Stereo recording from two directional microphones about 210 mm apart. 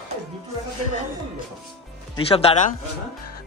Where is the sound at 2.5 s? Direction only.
25° left (ahead or behind).